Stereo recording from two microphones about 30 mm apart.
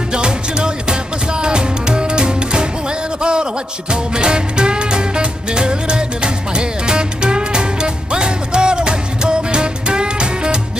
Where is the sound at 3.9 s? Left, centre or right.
Right.